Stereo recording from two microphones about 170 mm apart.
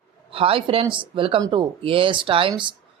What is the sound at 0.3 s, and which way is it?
Speech, 35° right (ahead or behind).